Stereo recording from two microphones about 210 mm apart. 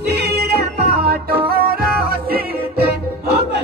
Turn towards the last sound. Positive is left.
turn(degrees=-50)  # may be behind; listen again after turning